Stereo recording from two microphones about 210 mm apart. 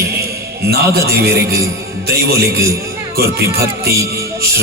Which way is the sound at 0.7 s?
50° right (ahead or behind).